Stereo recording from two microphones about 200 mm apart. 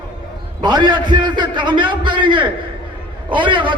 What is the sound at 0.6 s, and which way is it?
A man's voice, 20° right (ahead or behind).